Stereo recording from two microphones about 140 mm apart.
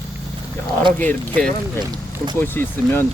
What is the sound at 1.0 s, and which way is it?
Speech, 10° left (ahead or behind).